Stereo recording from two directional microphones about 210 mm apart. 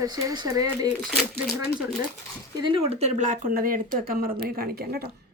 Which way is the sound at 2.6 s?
25° right (ahead or behind).